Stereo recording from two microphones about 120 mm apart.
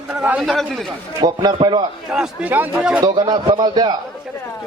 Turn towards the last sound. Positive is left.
turn(degrees=-35)  # may be behind; listen again after turning